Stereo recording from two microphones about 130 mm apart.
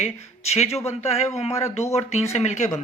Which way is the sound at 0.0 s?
55° left (ahead or behind).